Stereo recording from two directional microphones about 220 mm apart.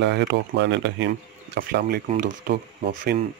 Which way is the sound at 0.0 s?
50° right (ahead or behind).